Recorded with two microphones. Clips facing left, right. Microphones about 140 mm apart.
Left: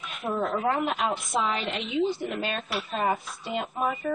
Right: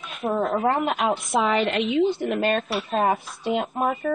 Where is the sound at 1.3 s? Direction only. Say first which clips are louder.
Right 6 dB; 65° right (ahead or behind).